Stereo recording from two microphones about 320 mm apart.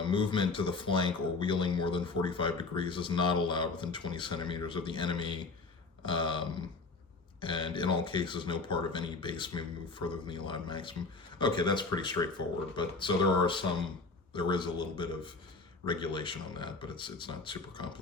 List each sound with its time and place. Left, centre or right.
0.1 s speech: centre
7.4 s speech: centre